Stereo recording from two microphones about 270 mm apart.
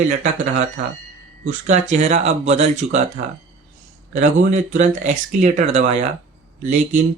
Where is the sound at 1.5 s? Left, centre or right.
Right.